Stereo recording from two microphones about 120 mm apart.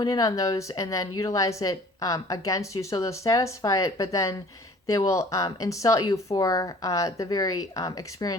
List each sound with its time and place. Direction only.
0.0 s speech: 30° left (ahead or behind)